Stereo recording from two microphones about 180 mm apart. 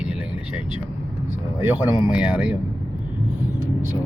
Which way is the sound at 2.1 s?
5° right (ahead or behind).